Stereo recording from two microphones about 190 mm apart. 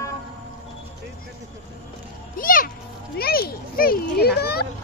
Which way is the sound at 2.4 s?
50° left (ahead or behind).